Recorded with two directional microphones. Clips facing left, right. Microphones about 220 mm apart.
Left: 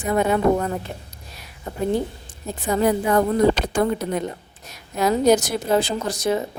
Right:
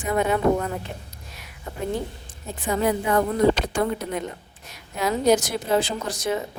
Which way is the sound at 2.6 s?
40° left (ahead or behind).